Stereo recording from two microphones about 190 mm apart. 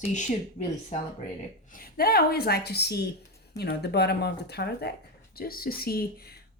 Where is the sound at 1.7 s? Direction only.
50° left (ahead or behind).